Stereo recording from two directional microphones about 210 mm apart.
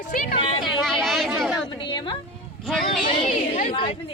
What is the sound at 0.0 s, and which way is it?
Speech, 40° left (ahead or behind).